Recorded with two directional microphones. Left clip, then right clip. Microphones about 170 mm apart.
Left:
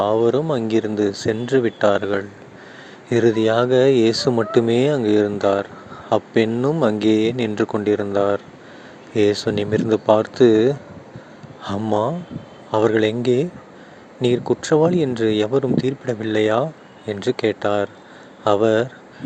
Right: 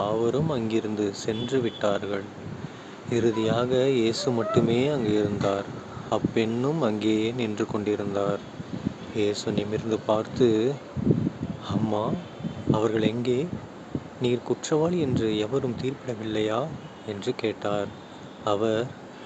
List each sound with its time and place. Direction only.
0.0 s speech: 40° left (ahead or behind)